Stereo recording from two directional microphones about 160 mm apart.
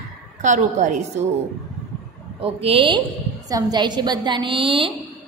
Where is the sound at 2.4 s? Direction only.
35° right (ahead or behind).